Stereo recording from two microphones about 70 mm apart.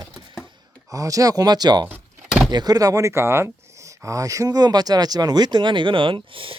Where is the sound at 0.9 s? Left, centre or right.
Right.